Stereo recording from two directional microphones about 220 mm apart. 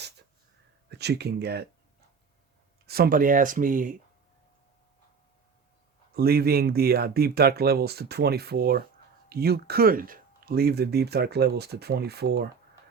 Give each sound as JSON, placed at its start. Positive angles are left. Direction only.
{"t": 0.9, "sound": "speech", "side_deg": -50}
{"t": 2.8, "sound": "speech", "side_deg": -45}
{"t": 6.1, "sound": "speech", "side_deg": -45}